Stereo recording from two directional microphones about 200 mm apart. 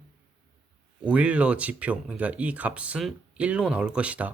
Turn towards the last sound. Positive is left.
turn(degrees=-5)  # may be behind; listen again after turning